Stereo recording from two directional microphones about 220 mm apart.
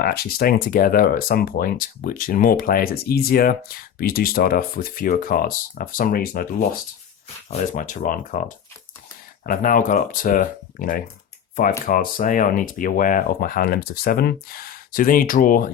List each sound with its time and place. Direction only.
0.0 s speech: 45° left (ahead or behind)
7.7 s speech: 35° left (ahead or behind)